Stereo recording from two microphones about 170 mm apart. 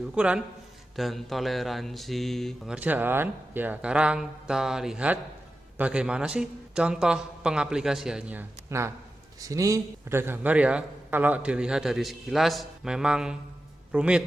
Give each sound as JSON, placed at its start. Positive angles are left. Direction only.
{"t": 0.1, "sound": "a man's voice", "side_deg": -5}